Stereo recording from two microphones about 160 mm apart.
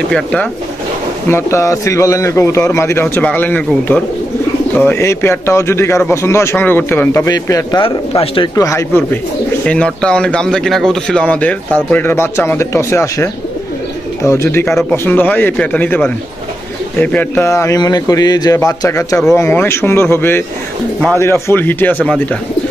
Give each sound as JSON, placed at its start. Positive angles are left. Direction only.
{"t": 0.1, "sound": "a man's voice", "side_deg": 10}
{"t": 7.8, "sound": "speech", "side_deg": 30}
{"t": 8.5, "sound": "a man's voice", "side_deg": 20}